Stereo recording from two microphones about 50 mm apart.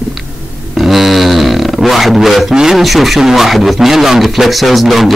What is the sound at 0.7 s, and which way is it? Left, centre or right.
Speech, centre.